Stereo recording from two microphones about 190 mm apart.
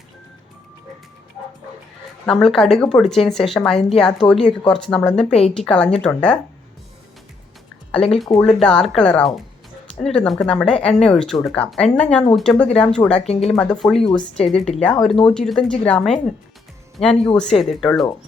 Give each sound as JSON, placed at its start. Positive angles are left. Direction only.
{"t": 2.2, "sound": "speech", "side_deg": 0}
{"t": 7.9, "sound": "speech", "side_deg": 5}
{"t": 13.2, "sound": "speech", "side_deg": 35}
{"t": 13.6, "sound": "speech", "side_deg": 5}